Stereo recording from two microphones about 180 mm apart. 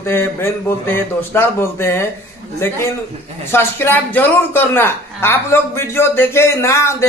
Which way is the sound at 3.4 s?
15° left (ahead or behind).